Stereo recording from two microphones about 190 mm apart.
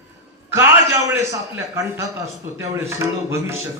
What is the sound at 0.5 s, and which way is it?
A man's voice, 15° right (ahead or behind).